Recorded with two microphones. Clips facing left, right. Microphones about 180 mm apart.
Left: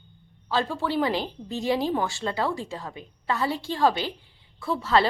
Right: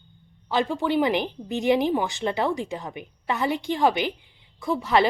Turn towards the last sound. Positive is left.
turn(degrees=-15)  # may be behind; listen again after turning